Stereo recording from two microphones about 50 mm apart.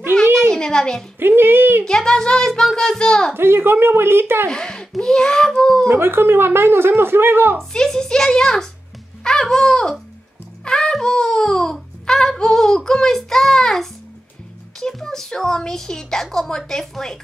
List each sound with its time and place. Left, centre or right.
0.5 s a child's voice: centre
1.2 s a woman's voice: right
1.9 s a child's voice: centre
3.3 s a woman's voice: right
4.5 s a child's voice: centre
5.9 s a woman's voice: right
7.5 s a child's voice: centre
10.6 s a sound: centre
14.8 s a child's voice: centre